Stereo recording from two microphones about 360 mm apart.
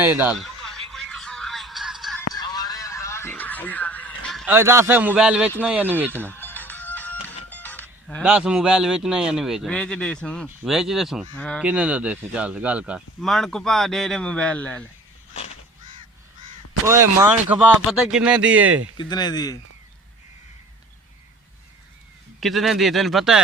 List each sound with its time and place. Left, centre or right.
0.0 s a sound: centre
2.3 s a sound: centre
6.2 s speech: centre
16.8 s speech: centre
18.9 s speech: centre
22.4 s speech: centre